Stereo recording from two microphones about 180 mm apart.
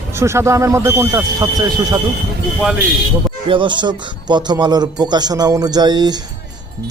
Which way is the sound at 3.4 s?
30° right (ahead or behind).